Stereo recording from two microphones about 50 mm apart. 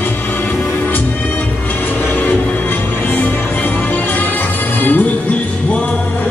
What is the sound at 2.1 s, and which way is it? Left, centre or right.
Music, left.